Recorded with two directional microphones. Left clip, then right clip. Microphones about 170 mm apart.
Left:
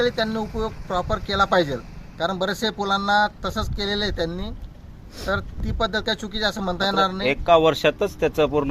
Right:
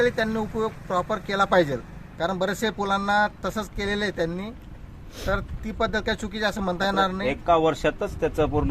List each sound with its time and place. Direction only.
0.0 s speech: 10° left (ahead or behind)
7.4 s speech: 75° left (ahead or behind)